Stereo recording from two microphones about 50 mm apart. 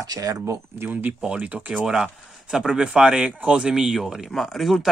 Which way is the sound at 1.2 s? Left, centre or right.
Right.